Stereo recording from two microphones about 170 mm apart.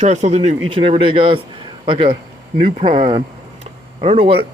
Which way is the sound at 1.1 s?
30° right (ahead or behind).